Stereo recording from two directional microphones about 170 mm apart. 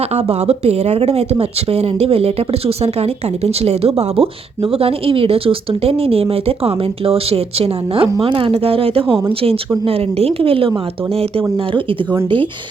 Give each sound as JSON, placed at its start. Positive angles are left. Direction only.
{"t": 0.0, "sound": "speech", "side_deg": -35}